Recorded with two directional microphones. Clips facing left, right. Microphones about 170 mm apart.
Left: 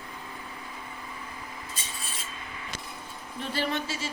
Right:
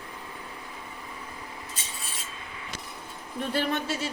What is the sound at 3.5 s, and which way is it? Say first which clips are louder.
Speech: right 2 dB; 60° right (ahead or behind).